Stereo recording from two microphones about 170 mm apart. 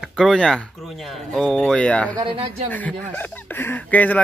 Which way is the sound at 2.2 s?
30° right (ahead or behind).